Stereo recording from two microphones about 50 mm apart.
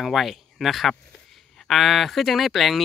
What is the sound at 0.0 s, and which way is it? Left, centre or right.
Speech, centre.